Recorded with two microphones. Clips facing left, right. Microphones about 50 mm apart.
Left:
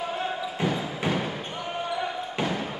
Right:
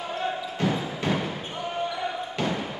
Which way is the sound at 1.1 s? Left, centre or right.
Centre.